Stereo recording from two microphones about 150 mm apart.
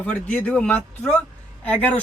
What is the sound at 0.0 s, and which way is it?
Speech, 10° left (ahead or behind).